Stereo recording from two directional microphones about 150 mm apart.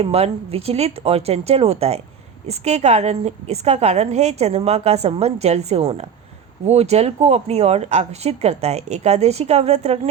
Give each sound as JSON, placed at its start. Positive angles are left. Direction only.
{"t": 0.0, "sound": "a woman's voice", "side_deg": -45}